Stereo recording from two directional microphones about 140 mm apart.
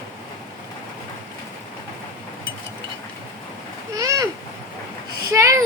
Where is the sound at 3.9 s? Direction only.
25° right (ahead or behind).